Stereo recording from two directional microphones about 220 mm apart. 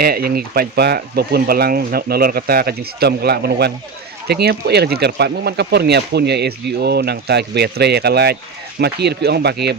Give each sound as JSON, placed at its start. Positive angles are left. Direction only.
{"t": 0.0, "sound": "speech", "side_deg": -45}